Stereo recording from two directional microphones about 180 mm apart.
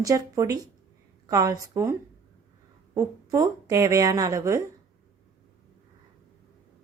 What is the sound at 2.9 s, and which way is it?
Speech, 20° right (ahead or behind).